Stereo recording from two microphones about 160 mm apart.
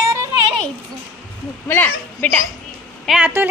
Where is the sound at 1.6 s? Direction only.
10° left (ahead or behind).